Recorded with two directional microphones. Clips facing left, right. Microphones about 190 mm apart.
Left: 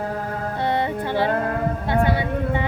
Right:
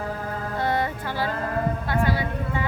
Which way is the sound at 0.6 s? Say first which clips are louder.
Left 3 dB; 20° left (ahead or behind).